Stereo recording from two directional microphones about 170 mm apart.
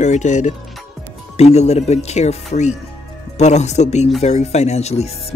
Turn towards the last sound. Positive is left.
turn(degrees=40)  # may be behind; listen again after turning